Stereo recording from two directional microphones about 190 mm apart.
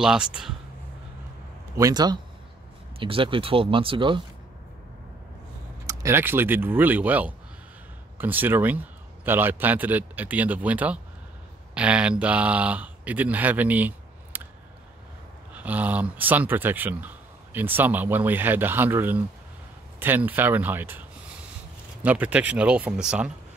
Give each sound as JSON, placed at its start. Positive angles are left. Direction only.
{"t": 0.0, "sound": "speech", "side_deg": -5}
{"t": 1.8, "sound": "speech", "side_deg": -20}
{"t": 5.9, "sound": "speech", "side_deg": -15}
{"t": 15.5, "sound": "speech", "side_deg": -10}
{"t": 22.0, "sound": "speech", "side_deg": -10}